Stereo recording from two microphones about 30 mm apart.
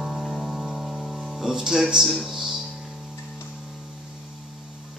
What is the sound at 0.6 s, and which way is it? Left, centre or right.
Music, right.